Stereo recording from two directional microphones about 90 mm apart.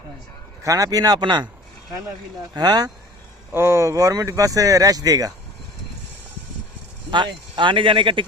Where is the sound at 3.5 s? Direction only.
30° right (ahead or behind); by 5.3 s 45° right (ahead or behind).